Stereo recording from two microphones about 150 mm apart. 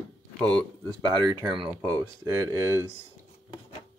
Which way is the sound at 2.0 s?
20° right (ahead or behind).